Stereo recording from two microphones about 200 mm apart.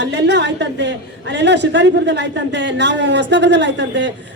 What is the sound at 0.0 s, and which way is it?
A woman's voice, 60° right (ahead or behind).